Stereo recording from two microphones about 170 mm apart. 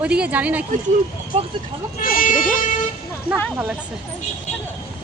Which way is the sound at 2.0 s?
55° left (ahead or behind).